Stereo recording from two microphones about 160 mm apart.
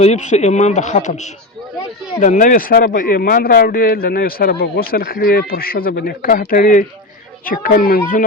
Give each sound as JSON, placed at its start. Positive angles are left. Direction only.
{"t": 0.0, "sound": "a man's voice", "side_deg": 45}